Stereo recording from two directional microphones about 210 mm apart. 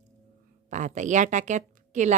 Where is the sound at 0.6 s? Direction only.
35° right (ahead or behind).